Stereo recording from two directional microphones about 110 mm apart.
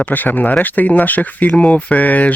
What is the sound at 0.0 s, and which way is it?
Speech, 15° left (ahead or behind).